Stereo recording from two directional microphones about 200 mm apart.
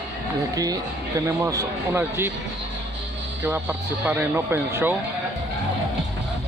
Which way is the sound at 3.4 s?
10° right (ahead or behind).